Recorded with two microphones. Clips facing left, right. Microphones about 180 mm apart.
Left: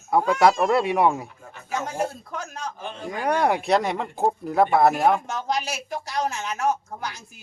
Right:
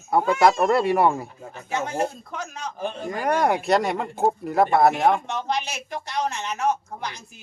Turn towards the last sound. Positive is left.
turn(degrees=0)  # may be behind; listen again after turning